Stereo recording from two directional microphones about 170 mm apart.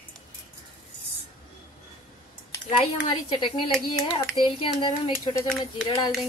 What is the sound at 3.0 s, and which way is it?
A woman's voice, 30° left (ahead or behind).